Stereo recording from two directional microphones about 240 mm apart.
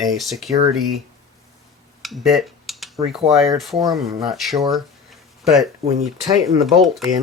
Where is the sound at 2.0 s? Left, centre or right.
Centre.